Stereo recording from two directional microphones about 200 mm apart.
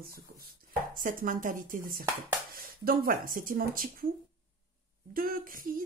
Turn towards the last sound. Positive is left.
turn(degrees=-45)  # may be behind; listen again after turning